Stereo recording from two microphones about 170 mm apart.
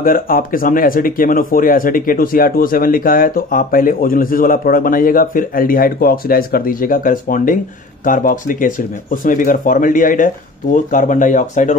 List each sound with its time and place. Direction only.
0.0 s speech: 55° left (ahead or behind)